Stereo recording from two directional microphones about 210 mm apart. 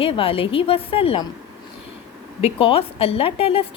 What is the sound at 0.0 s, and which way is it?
A woman's voice, 25° left (ahead or behind).